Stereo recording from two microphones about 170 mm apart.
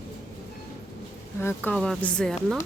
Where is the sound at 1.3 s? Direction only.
10° left (ahead or behind).